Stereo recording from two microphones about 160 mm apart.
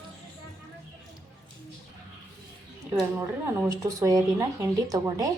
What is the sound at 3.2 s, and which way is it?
Speech, 15° right (ahead or behind).